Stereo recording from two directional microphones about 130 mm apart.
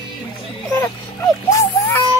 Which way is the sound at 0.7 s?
20° left (ahead or behind).